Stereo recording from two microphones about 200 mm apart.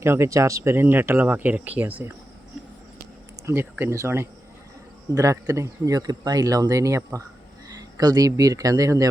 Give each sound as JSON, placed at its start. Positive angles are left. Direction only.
{"t": 0.0, "sound": "speech", "side_deg": -15}
{"t": 3.4, "sound": "speech", "side_deg": -10}